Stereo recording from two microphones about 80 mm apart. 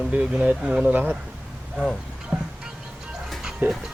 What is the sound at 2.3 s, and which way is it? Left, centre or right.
Music, centre.